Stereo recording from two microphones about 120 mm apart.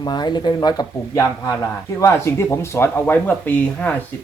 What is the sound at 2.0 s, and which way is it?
Speech, 20° left (ahead or behind).